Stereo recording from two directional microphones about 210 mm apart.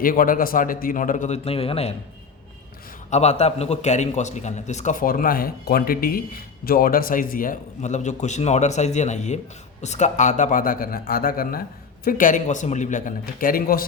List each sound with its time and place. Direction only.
0.0 s a man's voice: 40° left (ahead or behind)
3.1 s a man's voice: 30° left (ahead or behind)